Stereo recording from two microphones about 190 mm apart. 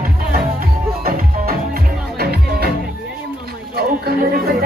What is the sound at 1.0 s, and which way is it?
Music, 50° right (ahead or behind).